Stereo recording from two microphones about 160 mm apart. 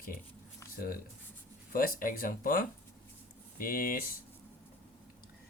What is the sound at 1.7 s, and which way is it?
Speech, 60° left (ahead or behind).